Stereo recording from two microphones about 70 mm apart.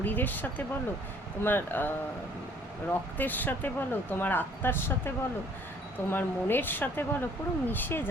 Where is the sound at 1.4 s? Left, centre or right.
Left.